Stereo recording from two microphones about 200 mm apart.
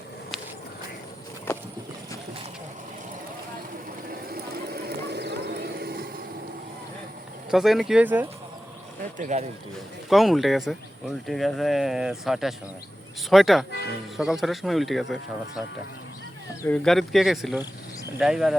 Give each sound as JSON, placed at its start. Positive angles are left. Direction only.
{"t": 4.1, "sound": "a sound", "side_deg": -50}
{"t": 7.5, "sound": "speech", "side_deg": 0}
{"t": 9.0, "sound": "speech", "side_deg": -40}
{"t": 10.1, "sound": "speech", "side_deg": 0}
{"t": 16.6, "sound": "speech", "side_deg": 5}